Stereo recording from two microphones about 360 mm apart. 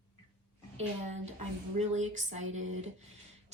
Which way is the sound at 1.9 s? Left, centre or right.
Centre.